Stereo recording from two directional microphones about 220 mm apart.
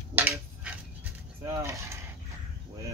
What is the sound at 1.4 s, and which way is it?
Mechanisms, 15° right (ahead or behind).